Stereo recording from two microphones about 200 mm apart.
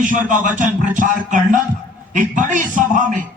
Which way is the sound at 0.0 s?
40° right (ahead or behind).